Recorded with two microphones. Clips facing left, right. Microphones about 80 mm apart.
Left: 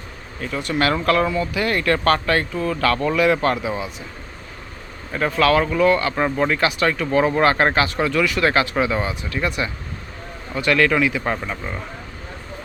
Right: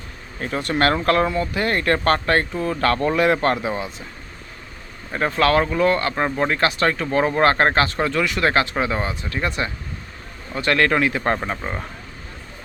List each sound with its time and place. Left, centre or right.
0.3 s speech: right
3.7 s speech: centre
5.1 s speech: right
6.1 s speech: centre
6.5 s speech: right
10.5 s speech: right
11.3 s speech: right